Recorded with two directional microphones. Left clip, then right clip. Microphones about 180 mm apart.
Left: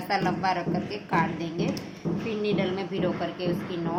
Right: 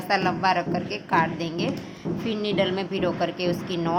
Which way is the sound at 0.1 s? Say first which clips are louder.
Right 4 dB; 25° right (ahead or behind).